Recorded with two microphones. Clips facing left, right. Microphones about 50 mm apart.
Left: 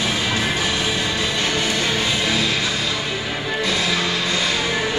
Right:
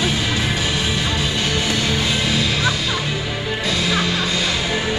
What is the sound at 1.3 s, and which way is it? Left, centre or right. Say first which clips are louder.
Music: right 1 dB; left.